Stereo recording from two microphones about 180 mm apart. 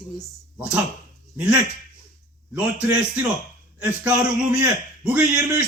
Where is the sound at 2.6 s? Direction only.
10° right (ahead or behind).